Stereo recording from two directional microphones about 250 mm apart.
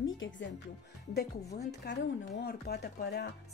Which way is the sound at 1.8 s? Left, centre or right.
Left.